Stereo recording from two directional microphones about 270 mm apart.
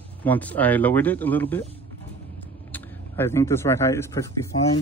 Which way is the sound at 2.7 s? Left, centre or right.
Centre.